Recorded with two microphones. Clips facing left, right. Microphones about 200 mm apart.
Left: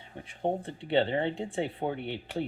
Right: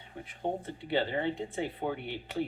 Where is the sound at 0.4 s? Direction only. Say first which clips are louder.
Left 3 dB; 25° left (ahead or behind).